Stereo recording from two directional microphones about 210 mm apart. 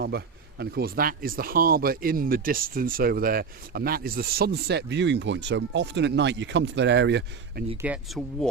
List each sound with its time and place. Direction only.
0.6 s speech: 45° right (ahead or behind)
7.8 s speech: 5° right (ahead or behind)